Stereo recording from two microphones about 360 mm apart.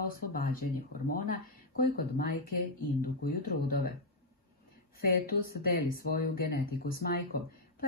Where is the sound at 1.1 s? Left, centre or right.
Left.